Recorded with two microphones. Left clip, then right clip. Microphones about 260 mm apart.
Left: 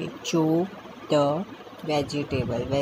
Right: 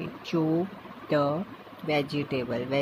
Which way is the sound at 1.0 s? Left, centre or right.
Centre.